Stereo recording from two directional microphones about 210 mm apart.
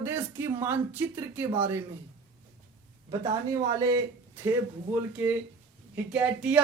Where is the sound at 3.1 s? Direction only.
15° right (ahead or behind).